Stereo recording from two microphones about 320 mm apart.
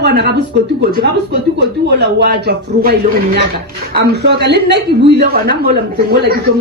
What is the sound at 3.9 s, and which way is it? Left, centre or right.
Speech, right.